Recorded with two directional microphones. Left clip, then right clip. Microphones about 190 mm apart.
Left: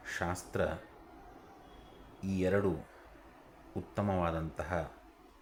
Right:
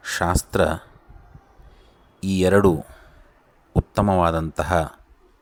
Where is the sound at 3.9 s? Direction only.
40° right (ahead or behind).